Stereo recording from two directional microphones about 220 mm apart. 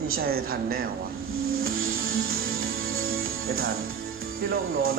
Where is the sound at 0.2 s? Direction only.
45° right (ahead or behind).